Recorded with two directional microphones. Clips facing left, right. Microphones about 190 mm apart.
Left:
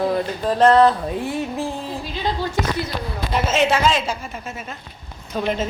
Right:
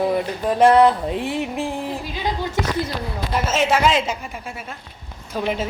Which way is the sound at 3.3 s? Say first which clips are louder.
Left 1 dB; 5° right (ahead or behind).